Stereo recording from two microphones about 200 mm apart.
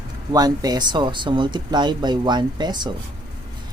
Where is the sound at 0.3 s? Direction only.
20° right (ahead or behind).